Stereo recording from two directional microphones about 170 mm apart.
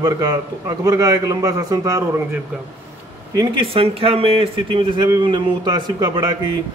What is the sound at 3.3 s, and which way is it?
Speech, 30° right (ahead or behind).